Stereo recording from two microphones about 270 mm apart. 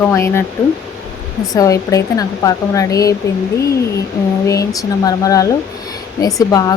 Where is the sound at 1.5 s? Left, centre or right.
Centre.